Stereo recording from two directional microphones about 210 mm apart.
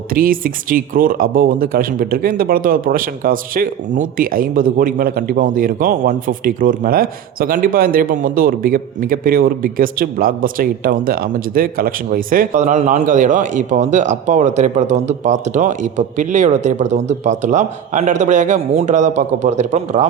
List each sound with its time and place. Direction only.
0.1 s a man's voice: 45° right (ahead or behind)